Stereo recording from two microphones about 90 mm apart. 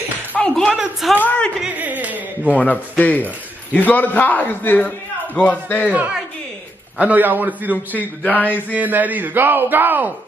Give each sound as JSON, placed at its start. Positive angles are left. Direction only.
{"t": 0.4, "sound": "a sound", "side_deg": 10}
{"t": 1.8, "sound": "carnatic music", "side_deg": -20}
{"t": 2.5, "sound": "a man's voice", "side_deg": 15}
{"t": 7.0, "sound": "speech", "side_deg": -20}
{"t": 7.7, "sound": "a man's voice", "side_deg": 20}
{"t": 8.5, "sound": "speech", "side_deg": -20}